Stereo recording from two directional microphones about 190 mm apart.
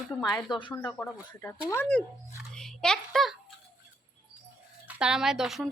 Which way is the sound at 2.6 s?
5° left (ahead or behind).